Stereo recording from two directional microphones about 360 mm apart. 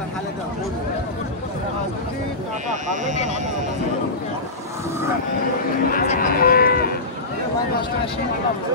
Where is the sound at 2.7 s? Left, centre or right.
Centre.